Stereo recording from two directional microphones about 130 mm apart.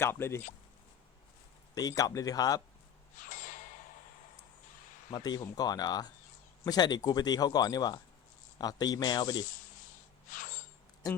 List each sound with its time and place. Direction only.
0.0 s speech: 20° left (ahead or behind)
1.7 s speech: 30° left (ahead or behind)
3.2 s a sound: 90° left
5.1 s speech: 30° left (ahead or behind)
10.2 s snort: 90° left